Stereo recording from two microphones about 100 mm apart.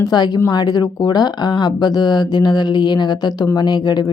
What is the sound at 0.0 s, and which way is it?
A woman's voice, 45° left (ahead or behind).